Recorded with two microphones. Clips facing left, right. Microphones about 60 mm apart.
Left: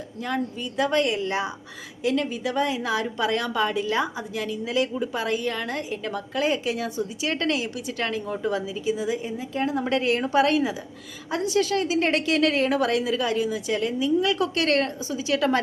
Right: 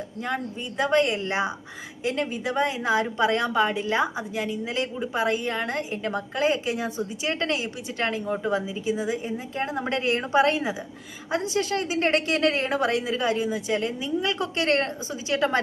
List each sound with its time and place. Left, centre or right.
0.8 s a woman's voice: right